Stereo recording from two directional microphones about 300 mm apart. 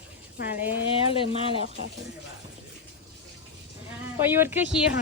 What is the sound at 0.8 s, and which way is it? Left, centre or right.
Speech, centre.